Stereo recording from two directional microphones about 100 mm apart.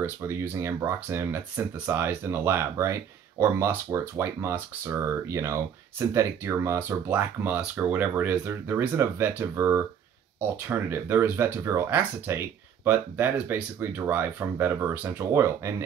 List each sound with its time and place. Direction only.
0.0 s speech: 25° right (ahead or behind)